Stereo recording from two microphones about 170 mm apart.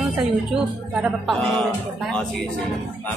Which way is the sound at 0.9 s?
5° right (ahead or behind).